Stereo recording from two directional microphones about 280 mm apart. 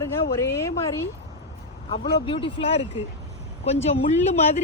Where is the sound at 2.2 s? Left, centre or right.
Centre.